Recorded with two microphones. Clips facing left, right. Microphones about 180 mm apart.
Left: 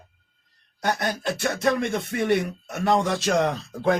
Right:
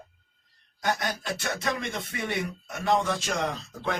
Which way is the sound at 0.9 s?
60° left (ahead or behind).